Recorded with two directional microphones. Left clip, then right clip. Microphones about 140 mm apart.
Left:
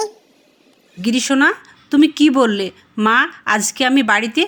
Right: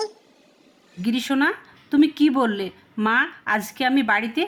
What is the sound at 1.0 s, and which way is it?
Speech, 15° left (ahead or behind).